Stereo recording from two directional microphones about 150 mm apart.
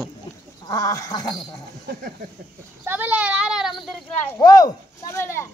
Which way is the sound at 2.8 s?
15° right (ahead or behind).